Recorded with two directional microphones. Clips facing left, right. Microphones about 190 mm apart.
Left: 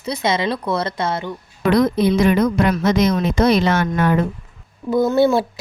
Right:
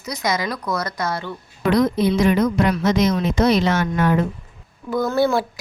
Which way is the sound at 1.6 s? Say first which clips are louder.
Left 2 dB; 60° left (ahead or behind).